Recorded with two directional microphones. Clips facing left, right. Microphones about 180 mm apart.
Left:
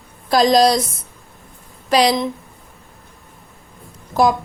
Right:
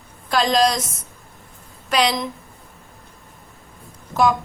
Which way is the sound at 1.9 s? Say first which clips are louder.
Left 5 dB; 35° left (ahead or behind).